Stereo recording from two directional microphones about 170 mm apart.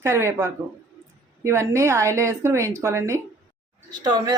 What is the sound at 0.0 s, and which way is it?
A woman's voice, 15° right (ahead or behind).